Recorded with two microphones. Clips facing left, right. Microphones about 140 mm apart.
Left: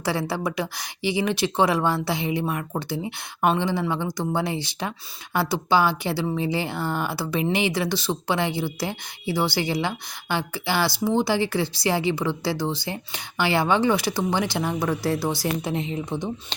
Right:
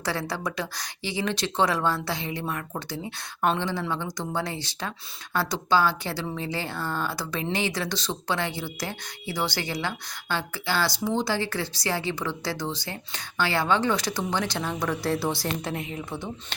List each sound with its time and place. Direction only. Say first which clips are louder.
0.0 s speech: left 4 dB; 10° left (ahead or behind)
4.0 s a woman's voice: left 6 dB; 25° left (ahead or behind)
4.4 s speech: left 4 dB; 15° left (ahead or behind)
15.4 s a woman's voice: left 4 dB; 20° left (ahead or behind)